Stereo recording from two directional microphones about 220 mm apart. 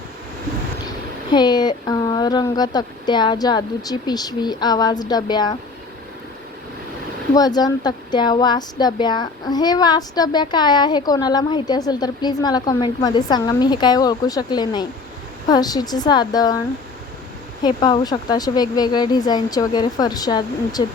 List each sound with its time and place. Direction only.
1.3 s a woman's voice: 20° left (ahead or behind)
7.3 s a woman's voice: 20° left (ahead or behind)